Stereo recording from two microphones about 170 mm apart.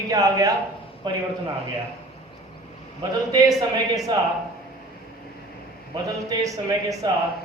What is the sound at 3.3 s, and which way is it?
Speech, 20° right (ahead or behind).